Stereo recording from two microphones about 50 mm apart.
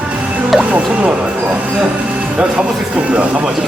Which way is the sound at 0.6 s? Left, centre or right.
Right.